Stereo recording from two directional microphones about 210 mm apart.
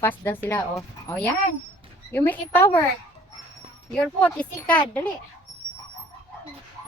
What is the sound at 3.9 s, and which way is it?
Speech, 5° left (ahead or behind).